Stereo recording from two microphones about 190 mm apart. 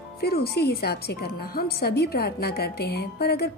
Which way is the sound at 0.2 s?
55° left (ahead or behind).